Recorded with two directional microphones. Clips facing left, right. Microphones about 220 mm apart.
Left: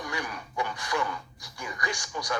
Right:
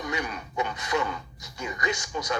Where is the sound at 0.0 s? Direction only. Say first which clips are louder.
Right 3 dB; 20° right (ahead or behind).